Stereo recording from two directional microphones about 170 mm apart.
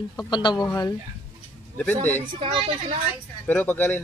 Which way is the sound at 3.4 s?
10° left (ahead or behind).